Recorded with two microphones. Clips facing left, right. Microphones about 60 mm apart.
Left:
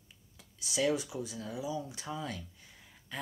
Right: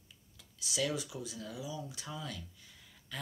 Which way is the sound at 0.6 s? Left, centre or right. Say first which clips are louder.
Left 5 dB; left.